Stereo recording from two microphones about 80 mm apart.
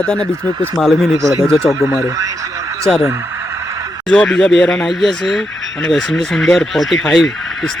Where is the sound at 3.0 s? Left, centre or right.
Right.